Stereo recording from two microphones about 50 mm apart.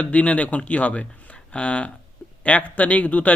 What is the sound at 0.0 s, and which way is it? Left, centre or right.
A man's voice, left.